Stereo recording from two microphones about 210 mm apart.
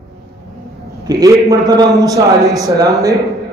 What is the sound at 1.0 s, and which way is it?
A man's voice, 15° right (ahead or behind).